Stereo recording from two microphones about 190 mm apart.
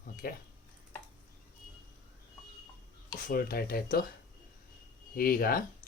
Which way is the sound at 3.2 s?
50° left (ahead or behind).